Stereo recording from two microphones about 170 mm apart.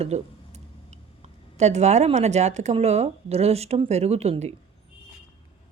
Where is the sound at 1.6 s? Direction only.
40° right (ahead or behind).